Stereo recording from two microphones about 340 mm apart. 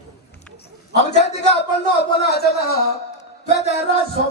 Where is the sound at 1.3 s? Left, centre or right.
Left.